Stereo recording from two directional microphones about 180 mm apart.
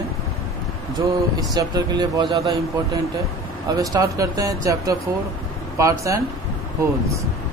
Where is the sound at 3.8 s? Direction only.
20° right (ahead or behind).